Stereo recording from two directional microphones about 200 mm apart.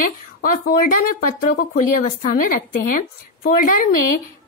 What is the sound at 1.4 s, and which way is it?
Speech, 45° left (ahead or behind).